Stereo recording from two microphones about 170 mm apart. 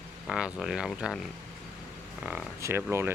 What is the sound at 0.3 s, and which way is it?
Speech, 5° right (ahead or behind).